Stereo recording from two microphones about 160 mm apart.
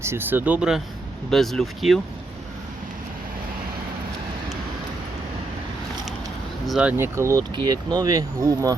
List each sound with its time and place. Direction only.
0.0 s speech: 15° right (ahead or behind)
6.7 s speech: 5° right (ahead or behind)
6.9 s speech: 15° right (ahead or behind)